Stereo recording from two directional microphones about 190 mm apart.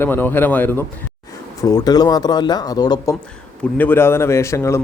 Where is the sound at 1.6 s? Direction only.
20° left (ahead or behind).